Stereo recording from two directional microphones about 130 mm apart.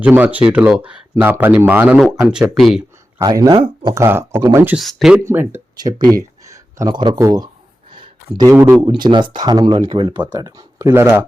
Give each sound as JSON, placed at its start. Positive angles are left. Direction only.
{"t": 0.0, "sound": "speech", "side_deg": -10}
{"t": 3.2, "sound": "speech", "side_deg": -25}
{"t": 3.5, "sound": "speech", "side_deg": -40}
{"t": 3.9, "sound": "speech", "side_deg": -20}
{"t": 4.8, "sound": "speech", "side_deg": 0}
{"t": 5.2, "sound": "speech", "side_deg": -15}
{"t": 7.9, "sound": "a sound", "side_deg": -40}
{"t": 8.4, "sound": "speech", "side_deg": -25}
{"t": 10.3, "sound": "speech", "side_deg": -25}